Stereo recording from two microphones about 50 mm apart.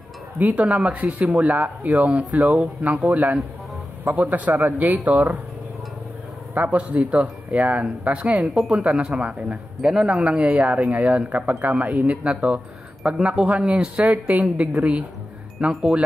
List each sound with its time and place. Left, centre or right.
0.4 s speech: right
0.9 s speech: right
6.5 s speech: right
15.7 s speech: centre